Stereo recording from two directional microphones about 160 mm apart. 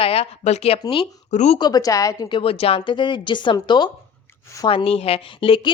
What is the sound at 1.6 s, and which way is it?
A woman's voice, 25° left (ahead or behind).